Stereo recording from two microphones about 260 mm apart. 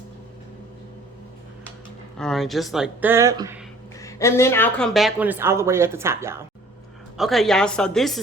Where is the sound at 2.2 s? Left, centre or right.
Centre.